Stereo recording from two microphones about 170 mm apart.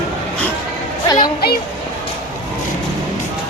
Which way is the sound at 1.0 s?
25° left (ahead or behind).